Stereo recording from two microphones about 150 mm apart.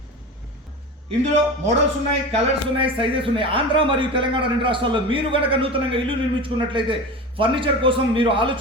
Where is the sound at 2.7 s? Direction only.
35° right (ahead or behind).